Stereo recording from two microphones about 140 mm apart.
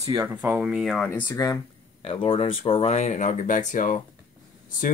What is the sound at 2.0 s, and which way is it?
Speech, 40° left (ahead or behind).